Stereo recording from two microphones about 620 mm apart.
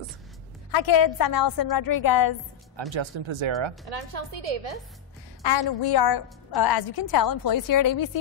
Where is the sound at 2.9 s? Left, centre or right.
Right.